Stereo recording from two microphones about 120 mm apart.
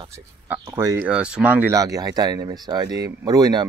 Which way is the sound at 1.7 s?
30° right (ahead or behind).